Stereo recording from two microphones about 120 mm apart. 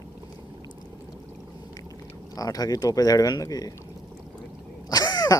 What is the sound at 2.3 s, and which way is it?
Speech, 30° left (ahead or behind).